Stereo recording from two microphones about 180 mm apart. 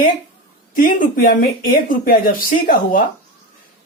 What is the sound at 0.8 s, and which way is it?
Speech, 50° left (ahead or behind).